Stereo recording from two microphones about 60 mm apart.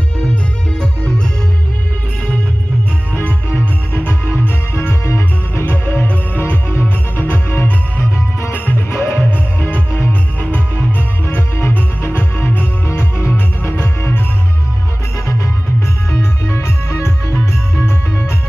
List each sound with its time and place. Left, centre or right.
3.9 s music: left
16.1 s music: left